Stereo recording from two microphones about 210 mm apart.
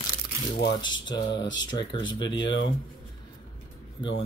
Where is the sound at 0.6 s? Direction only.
20° left (ahead or behind).